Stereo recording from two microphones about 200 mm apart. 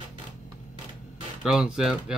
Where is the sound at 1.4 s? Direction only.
Centre (ahead or behind).